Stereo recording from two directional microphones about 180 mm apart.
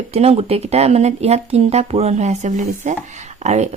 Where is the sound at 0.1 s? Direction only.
35° right (ahead or behind).